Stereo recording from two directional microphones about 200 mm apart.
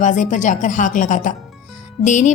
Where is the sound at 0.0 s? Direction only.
40° left (ahead or behind).